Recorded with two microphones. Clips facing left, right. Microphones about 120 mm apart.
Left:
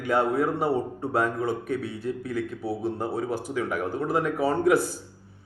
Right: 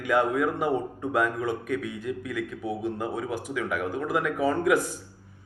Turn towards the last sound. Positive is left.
turn(degrees=35)  # may be behind; listen again after turning